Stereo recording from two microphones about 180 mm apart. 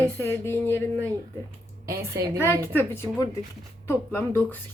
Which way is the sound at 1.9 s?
15° right (ahead or behind).